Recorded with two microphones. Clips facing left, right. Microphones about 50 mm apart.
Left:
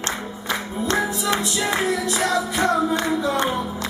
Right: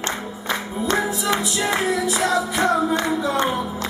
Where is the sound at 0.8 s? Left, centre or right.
Right.